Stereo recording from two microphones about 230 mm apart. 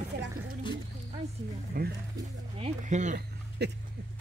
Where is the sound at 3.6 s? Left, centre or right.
Right.